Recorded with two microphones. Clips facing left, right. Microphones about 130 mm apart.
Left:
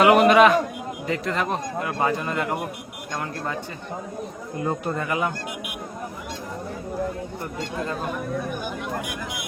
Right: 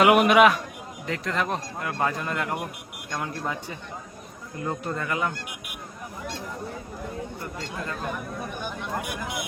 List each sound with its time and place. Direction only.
0.0 s speech: 5° right (ahead or behind)
4.6 s speech: 15° left (ahead or behind)